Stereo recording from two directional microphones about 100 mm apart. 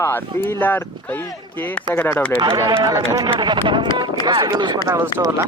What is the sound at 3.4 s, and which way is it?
Speech, 50° right (ahead or behind).